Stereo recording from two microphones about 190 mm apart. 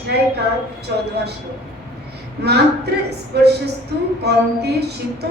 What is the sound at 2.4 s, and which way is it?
A woman's voice, 60° right (ahead or behind).